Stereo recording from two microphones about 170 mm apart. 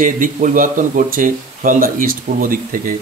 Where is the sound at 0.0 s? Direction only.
50° right (ahead or behind).